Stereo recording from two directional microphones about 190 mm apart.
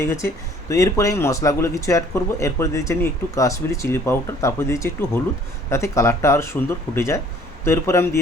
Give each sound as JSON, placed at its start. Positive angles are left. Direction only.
{"t": 0.0, "sound": "speech", "side_deg": 15}